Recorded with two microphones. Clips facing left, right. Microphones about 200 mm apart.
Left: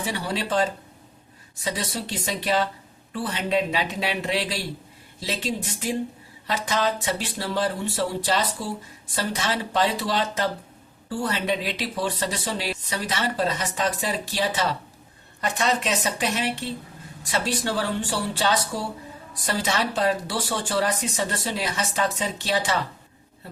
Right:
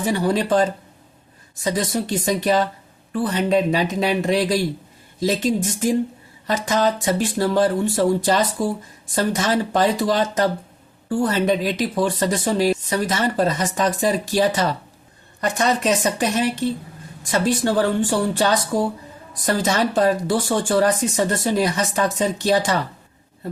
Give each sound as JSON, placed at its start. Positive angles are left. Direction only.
{"t": 0.0, "sound": "speech", "side_deg": -45}